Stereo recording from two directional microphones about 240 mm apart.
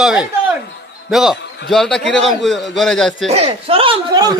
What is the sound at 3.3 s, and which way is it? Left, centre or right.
Speech, right.